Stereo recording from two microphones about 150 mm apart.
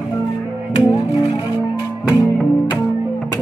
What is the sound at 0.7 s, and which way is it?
Music, 25° left (ahead or behind).